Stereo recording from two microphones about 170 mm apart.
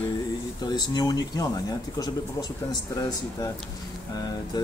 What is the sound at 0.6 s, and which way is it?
Speech, 25° left (ahead or behind).